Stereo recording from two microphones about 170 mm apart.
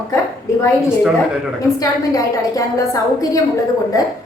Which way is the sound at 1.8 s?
20° left (ahead or behind).